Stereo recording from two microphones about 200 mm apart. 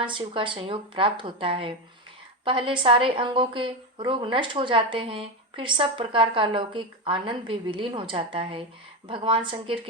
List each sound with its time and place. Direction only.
0.0 s a woman's voice: 25° right (ahead or behind)